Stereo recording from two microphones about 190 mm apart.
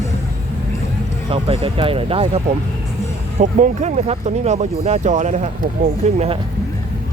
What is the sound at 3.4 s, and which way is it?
Speech, 40° right (ahead or behind).